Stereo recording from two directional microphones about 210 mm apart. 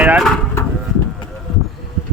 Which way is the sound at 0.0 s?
5° right (ahead or behind).